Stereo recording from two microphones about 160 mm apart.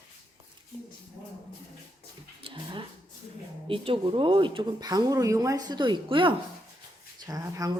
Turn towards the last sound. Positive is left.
turn(degrees=-20)  # may be behind; listen again after turning